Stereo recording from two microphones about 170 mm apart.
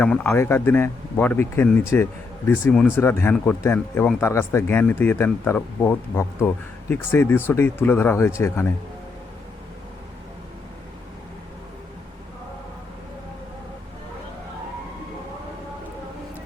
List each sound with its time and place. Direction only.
0.0 s speech: 10° left (ahead or behind)